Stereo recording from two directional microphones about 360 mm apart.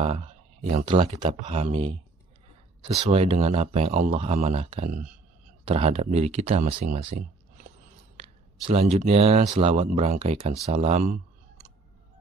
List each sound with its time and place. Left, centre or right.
0.0 s a sound: centre
0.8 s speech: centre
2.8 s speech: centre
8.2 s speech: centre